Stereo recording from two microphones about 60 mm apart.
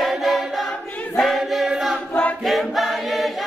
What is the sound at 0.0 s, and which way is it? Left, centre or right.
Choir, centre.